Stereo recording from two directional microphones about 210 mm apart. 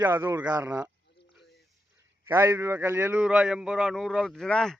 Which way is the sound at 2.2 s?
10° right (ahead or behind).